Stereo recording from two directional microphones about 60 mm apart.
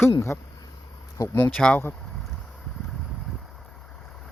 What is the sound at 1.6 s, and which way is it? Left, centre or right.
Speech, centre.